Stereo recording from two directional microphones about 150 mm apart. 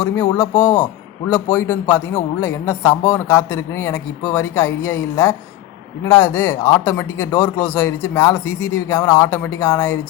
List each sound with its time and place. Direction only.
0.0 s a man's voice: 15° left (ahead or behind)